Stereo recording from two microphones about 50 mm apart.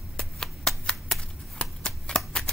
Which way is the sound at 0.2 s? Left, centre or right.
Centre.